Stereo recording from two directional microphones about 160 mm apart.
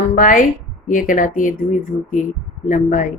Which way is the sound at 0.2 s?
55° left (ahead or behind).